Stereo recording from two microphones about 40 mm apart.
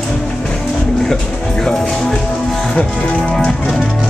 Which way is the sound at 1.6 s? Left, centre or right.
Centre.